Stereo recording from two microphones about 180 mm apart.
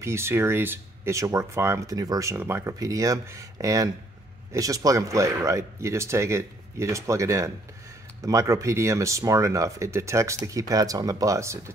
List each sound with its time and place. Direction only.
0.0 s speech: 15° right (ahead or behind)